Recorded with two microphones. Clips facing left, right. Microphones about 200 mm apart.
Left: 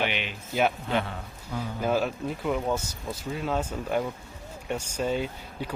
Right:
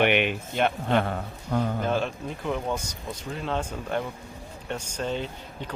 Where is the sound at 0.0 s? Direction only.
60° right (ahead or behind).